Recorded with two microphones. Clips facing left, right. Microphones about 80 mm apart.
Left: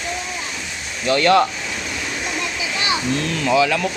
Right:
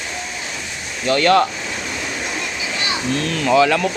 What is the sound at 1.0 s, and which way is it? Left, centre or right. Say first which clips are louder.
Speech: right 1 dB; centre.